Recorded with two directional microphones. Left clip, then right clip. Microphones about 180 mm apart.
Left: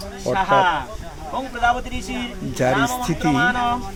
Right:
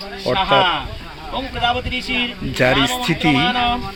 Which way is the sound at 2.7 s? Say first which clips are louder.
Right 3 dB; 40° right (ahead or behind).